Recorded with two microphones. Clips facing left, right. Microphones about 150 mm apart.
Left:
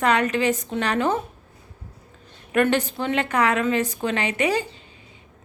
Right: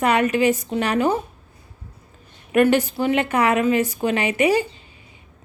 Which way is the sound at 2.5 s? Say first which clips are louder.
Right 4 dB; 15° right (ahead or behind).